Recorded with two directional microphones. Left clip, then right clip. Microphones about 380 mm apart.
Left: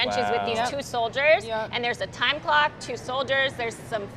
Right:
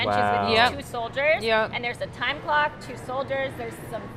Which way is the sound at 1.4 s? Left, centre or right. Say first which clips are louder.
Right 7 dB; right.